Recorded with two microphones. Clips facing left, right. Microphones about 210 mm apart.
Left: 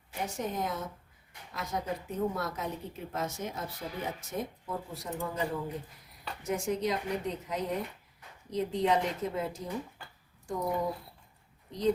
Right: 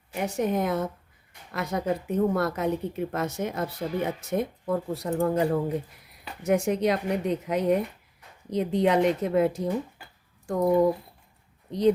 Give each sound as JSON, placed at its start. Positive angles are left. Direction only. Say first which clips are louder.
{"t": 0.1, "sound": "a woman's voice", "louder": "right 9 dB", "side_deg": -65}
{"t": 11.7, "sound": "speech", "louder": "right 7 dB", "side_deg": -70}